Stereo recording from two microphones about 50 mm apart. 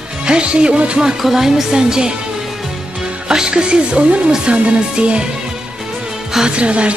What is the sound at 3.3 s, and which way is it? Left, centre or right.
Music, centre.